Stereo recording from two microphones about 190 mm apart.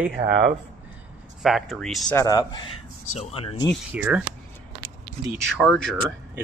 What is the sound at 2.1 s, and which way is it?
Speech, 20° left (ahead or behind).